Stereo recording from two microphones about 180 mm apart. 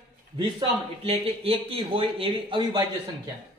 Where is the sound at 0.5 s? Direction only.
30° right (ahead or behind).